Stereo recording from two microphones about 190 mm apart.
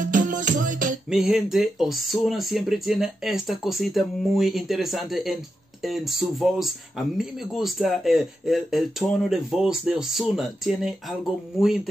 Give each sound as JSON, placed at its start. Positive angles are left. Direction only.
{"t": 0.1, "sound": "music", "side_deg": -45}
{"t": 1.1, "sound": "speech", "side_deg": 0}